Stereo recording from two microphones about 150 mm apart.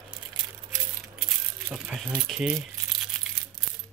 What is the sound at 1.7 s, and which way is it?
Speech, centre (ahead or behind).